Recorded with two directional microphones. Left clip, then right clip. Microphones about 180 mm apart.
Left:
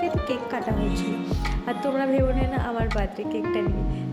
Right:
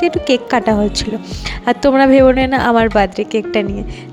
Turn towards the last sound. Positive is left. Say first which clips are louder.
# right 10 dB
turn(degrees=-55)  # may be behind; listen again after turning